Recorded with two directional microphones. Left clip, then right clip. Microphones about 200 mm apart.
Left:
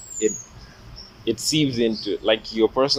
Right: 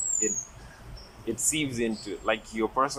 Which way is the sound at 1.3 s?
40° left (ahead or behind).